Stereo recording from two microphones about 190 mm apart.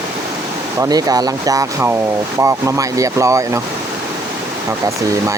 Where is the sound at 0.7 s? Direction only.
20° right (ahead or behind).